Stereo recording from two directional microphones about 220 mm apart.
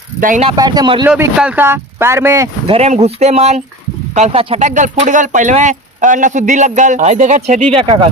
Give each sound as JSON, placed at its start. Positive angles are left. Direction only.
{"t": 0.2, "sound": "speech", "side_deg": -40}
{"t": 0.4, "sound": "speech", "side_deg": -20}
{"t": 1.0, "sound": "speech", "side_deg": -5}
{"t": 2.7, "sound": "speech", "side_deg": -30}